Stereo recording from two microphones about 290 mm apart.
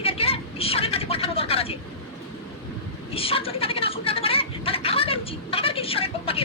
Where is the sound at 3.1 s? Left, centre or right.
Centre.